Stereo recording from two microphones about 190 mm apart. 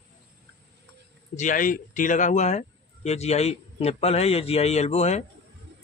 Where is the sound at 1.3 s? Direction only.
40° left (ahead or behind).